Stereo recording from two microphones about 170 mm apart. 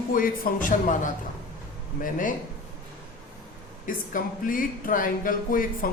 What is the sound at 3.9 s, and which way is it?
Speech, 55° left (ahead or behind).